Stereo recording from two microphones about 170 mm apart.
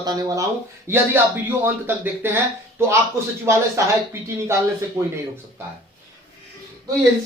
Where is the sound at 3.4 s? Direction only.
15° right (ahead or behind).